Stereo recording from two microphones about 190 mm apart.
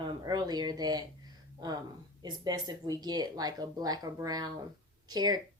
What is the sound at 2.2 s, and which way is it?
A woman's voice, 20° right (ahead or behind).